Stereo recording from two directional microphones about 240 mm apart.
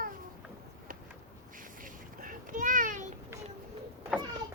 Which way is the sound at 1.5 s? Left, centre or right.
Right.